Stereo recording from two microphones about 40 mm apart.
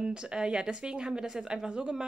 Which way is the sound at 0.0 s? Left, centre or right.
Right.